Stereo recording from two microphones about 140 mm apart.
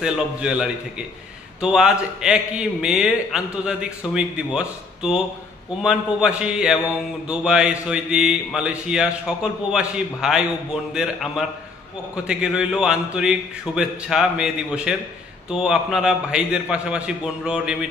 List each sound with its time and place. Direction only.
0.0 s a man's voice: 5° right (ahead or behind)